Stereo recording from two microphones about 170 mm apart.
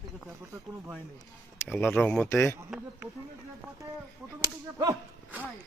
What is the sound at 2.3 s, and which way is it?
Speech, 15° left (ahead or behind).